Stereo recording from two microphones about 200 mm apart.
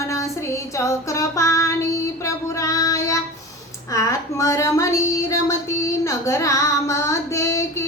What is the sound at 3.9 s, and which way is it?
Child singing, 15° left (ahead or behind).